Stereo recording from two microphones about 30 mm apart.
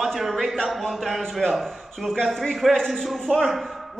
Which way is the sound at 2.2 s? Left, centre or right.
Centre.